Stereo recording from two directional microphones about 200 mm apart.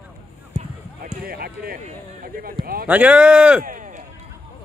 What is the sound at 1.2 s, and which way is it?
Speech, 50° right (ahead or behind).